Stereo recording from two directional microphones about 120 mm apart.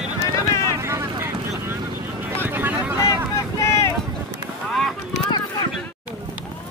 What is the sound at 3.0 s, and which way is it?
Vehicle, 25° left (ahead or behind).